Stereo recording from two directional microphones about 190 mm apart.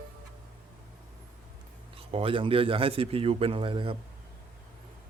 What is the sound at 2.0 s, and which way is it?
Speech, 30° right (ahead or behind).